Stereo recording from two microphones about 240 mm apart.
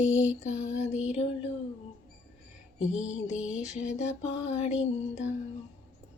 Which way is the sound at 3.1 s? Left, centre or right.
Left.